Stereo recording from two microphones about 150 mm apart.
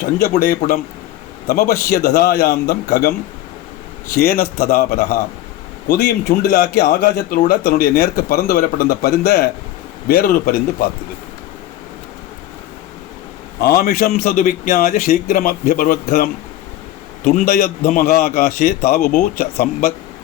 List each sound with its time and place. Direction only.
0.2 s a man's voice: 85° left
13.6 s a man's voice: 80° left
17.3 s speech: 55° left (ahead or behind); by 19.6 s 75° left (ahead or behind)